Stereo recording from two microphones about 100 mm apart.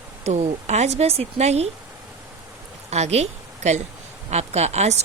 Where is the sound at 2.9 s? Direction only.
90° right.